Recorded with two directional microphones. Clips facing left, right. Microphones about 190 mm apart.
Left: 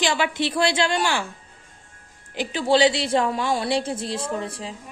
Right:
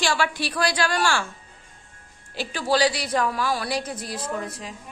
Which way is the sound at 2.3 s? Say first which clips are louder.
Left 4 dB; 20° left (ahead or behind).